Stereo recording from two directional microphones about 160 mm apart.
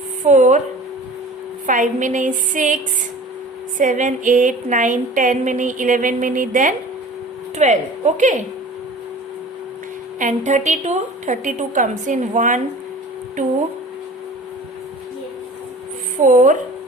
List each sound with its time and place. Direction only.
0.3 s speech: 50° right (ahead or behind)
1.6 s speech: 55° right (ahead or behind)
3.8 s speech: 55° right (ahead or behind)
10.2 s speech: 50° right (ahead or behind)
16.2 s speech: 50° right (ahead or behind)